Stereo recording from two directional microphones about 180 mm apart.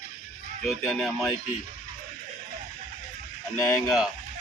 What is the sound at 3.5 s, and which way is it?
Speech, 20° left (ahead or behind).